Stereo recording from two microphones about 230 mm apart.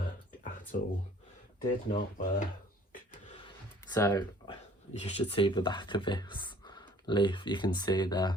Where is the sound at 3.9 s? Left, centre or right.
Centre.